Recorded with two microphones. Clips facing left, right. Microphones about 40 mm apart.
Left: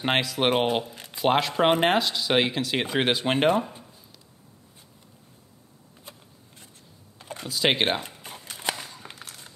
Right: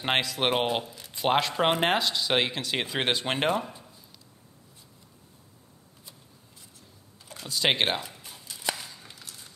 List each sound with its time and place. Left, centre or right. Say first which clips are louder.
0.0 s speech: left 3 dB; centre
0.8 s speech: left 3 dB; left
1.1 s speech: left 2 dB; centre
7.2 s computer keyboard: left 7 dB; left
7.4 s speech: left 2 dB; centre
8.2 s a sound: left 4 dB; left
9.2 s run: left 4 dB; left